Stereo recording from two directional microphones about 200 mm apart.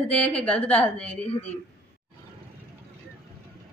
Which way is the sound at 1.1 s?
30° left (ahead or behind).